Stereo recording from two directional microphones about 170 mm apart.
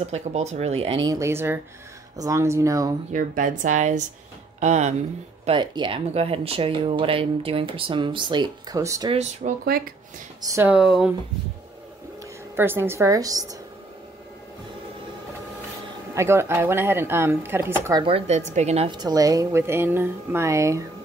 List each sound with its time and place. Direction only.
0.0 s speech: 40° right (ahead or behind)
1.0 s a woman's voice: 15° right (ahead or behind)
3.1 s speech: 50° right (ahead or behind)
5.4 s speech: 30° right (ahead or behind)
9.1 s speech: 40° right (ahead or behind)
10.4 s a woman's voice: 15° right (ahead or behind)
12.5 s a woman's voice: 15° right (ahead or behind)
16.2 s a woman's voice: 15° right (ahead or behind)
18.0 s speech: 35° right (ahead or behind)
18.9 s a woman's voice: 25° right (ahead or behind)